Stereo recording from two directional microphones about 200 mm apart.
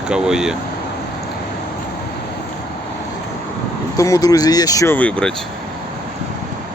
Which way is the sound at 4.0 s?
15° left (ahead or behind).